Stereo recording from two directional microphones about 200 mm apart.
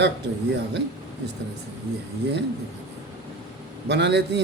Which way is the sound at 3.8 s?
60° right (ahead or behind).